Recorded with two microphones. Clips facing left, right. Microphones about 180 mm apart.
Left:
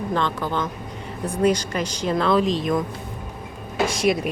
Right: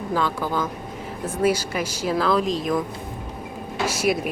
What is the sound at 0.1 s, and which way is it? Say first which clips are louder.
Speech: right 2 dB; 5° right (ahead or behind).